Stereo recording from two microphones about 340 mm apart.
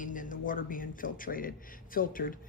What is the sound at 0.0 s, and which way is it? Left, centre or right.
Speech, left.